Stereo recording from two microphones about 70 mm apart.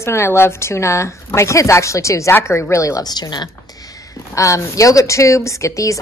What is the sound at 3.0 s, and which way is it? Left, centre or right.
Speech, left.